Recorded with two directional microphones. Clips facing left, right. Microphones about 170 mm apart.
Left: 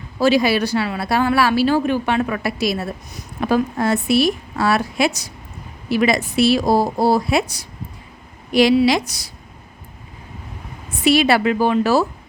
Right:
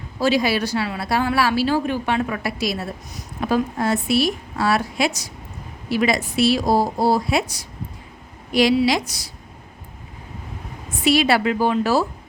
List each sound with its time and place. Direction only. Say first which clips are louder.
0.2 s a woman's voice: left 3 dB; 65° left (ahead or behind)
8.5 s a woman's voice: left 3 dB; 60° left (ahead or behind)
11.0 s a woman's voice: left 2 dB; 60° left (ahead or behind)